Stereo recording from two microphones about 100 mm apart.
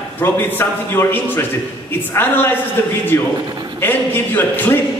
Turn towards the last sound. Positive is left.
turn(degrees=20)  # may be behind; listen again after turning